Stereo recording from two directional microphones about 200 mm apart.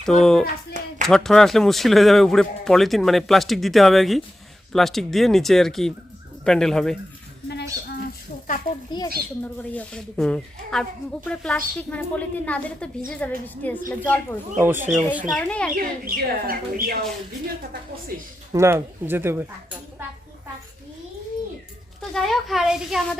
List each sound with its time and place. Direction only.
0.0 s speech: 5° left (ahead or behind)
7.4 s a sound: 55° left (ahead or behind)
8.9 s a child's voice: 20° left (ahead or behind)
9.4 s a woman's voice: 10° left (ahead or behind)
14.6 s speech: 10° right (ahead or behind); by 15.7 s 5° left (ahead or behind)
15.7 s speech: 45° right (ahead or behind)
18.5 s speech: 10° right (ahead or behind)
22.1 s speech: centre (ahead or behind)